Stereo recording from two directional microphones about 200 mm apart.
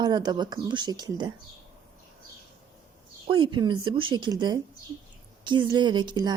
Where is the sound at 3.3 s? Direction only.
25° right (ahead or behind).